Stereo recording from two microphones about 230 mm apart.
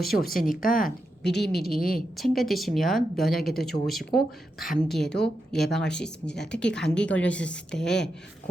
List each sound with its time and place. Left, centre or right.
0.0 s a woman's voice: centre
0.3 s a woman's voice: left
2.0 s a woman's voice: centre